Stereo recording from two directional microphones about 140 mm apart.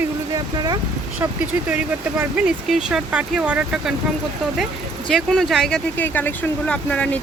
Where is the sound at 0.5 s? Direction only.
30° right (ahead or behind).